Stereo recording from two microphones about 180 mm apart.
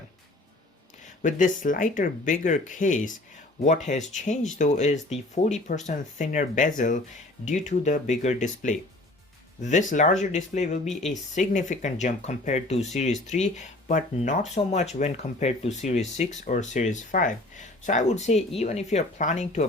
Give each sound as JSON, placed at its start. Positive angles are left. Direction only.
{"t": 1.2, "sound": "speech", "side_deg": 45}
{"t": 9.9, "sound": "speech", "side_deg": 45}